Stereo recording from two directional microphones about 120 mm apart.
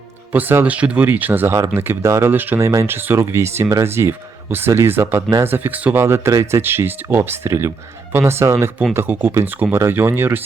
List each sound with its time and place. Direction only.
0.3 s speech: 15° right (ahead or behind)